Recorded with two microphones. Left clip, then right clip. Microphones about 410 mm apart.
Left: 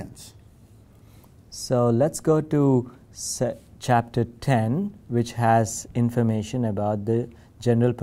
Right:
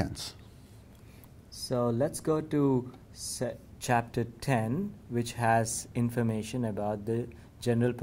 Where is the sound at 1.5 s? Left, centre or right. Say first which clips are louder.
Left 8 dB; left.